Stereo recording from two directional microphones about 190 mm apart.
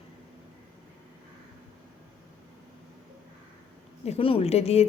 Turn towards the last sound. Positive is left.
turn(degrees=35)  # may be behind; listen again after turning